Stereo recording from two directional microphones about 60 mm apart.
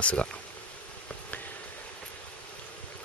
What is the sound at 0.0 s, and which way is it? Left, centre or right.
Speech, left.